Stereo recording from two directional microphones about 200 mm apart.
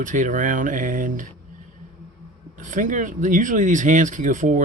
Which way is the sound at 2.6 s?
40° right (ahead or behind).